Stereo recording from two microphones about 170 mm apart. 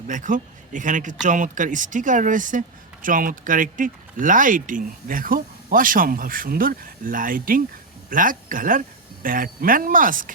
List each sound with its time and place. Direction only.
0.1 s a man's voice: 50° right (ahead or behind)